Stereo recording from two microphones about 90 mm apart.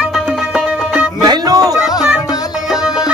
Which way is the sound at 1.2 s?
45° right (ahead or behind).